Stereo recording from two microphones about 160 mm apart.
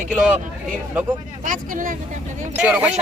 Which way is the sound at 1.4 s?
55° right (ahead or behind).